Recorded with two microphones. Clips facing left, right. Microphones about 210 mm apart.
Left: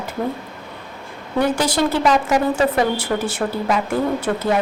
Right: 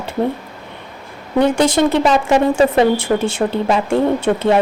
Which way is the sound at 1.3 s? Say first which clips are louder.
Right 5 dB; 25° right (ahead or behind).